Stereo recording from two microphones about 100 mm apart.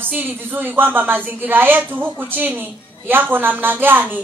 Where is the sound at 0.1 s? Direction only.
20° right (ahead or behind).